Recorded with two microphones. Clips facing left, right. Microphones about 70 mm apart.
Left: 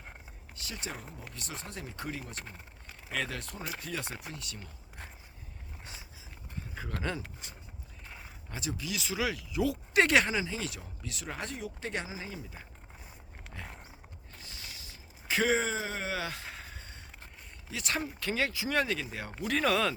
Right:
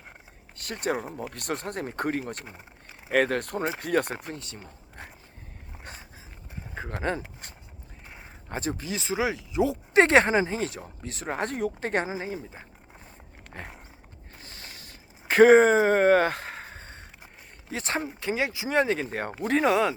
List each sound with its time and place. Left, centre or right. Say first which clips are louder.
0.5 s speech: right 12 dB; right
4.3 s speech: right 6 dB; right
5.8 s a sound: right 6 dB; right
7.0 s speech: right 7 dB; right
7.4 s a sound: right 3 dB; right
8.4 s speech: right 6 dB; right
13.5 s a sound: right 5 dB; right
17.7 s speech: right 5 dB; right
18.0 s speech: right 4 dB; right
19.1 s speech: right 7 dB; right